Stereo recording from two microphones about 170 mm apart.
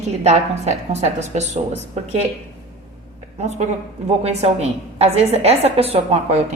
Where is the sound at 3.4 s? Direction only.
40° right (ahead or behind).